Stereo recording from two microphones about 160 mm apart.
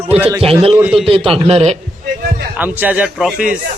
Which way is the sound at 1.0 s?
35° right (ahead or behind).